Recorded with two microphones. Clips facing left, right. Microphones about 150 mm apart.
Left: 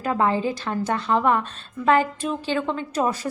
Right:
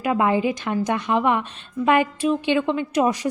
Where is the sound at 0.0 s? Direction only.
10° right (ahead or behind).